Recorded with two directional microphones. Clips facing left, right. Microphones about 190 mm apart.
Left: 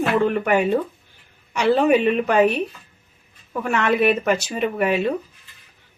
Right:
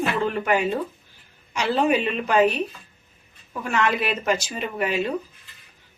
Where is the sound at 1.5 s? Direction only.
60° left (ahead or behind).